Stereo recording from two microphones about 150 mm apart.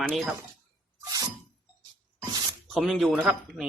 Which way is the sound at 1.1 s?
25° right (ahead or behind).